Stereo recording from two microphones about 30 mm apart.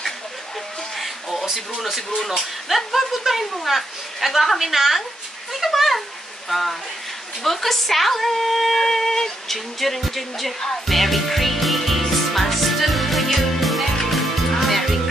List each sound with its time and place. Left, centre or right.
0.9 s a sound: centre
2.1 s speech: centre
8.8 s speech: centre
10.9 s music: centre